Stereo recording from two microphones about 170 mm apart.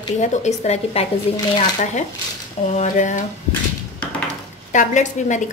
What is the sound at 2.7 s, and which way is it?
Speech, 45° left (ahead or behind).